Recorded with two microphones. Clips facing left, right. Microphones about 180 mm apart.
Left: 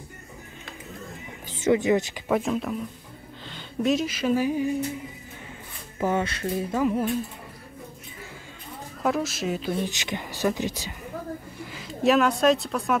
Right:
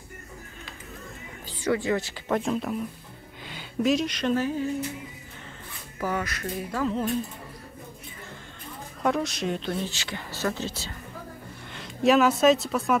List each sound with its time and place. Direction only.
1.5 s speech: 20° left (ahead or behind)
2.2 s speech: 5° left (ahead or behind)
5.9 s speech: 25° left (ahead or behind)
9.0 s speech: centre (ahead or behind)
9.8 s speech: 20° left (ahead or behind)
11.7 s speech: centre (ahead or behind)